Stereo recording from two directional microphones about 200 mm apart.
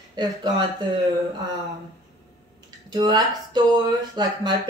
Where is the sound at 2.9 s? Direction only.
20° right (ahead or behind).